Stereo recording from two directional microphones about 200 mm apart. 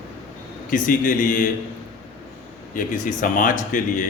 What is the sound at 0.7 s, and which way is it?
Speech, 40° left (ahead or behind).